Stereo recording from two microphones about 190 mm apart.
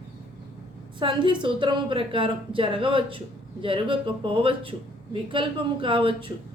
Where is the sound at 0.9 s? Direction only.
25° right (ahead or behind).